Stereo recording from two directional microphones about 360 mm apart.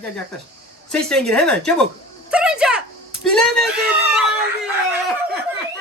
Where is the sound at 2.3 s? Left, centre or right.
Centre.